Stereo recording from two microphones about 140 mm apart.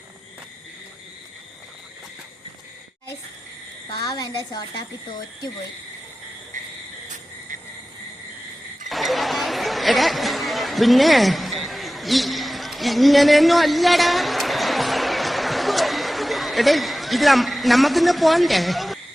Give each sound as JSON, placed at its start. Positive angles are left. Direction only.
{"t": 3.8, "sound": "a woman's voice", "side_deg": 30}
{"t": 8.9, "sound": "chatter", "side_deg": 0}